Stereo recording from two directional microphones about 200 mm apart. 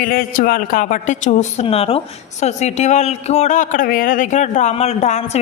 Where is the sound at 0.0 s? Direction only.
45° left (ahead or behind).